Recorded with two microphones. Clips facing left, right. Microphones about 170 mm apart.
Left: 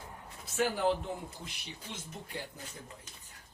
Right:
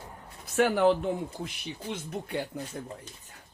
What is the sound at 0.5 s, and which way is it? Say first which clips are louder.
Speech: right 7 dB; 65° right (ahead or behind).